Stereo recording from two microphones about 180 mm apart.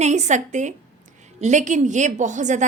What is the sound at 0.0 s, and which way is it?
A woman's voice, 40° right (ahead or behind).